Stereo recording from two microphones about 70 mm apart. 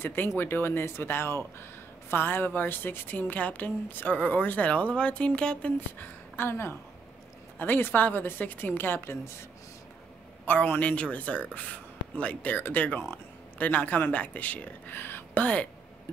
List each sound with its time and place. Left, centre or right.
0.0 s speech: left; by 5.7 s centre
5.8 s a woman's voice: left
10.4 s speech: left
15.4 s speech: centre